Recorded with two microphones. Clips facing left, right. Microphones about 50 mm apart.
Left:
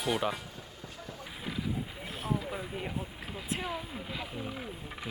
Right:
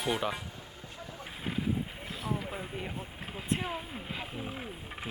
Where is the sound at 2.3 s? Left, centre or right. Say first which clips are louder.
Left 5 dB; right.